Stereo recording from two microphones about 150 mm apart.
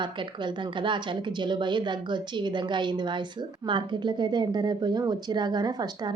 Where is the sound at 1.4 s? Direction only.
30° right (ahead or behind).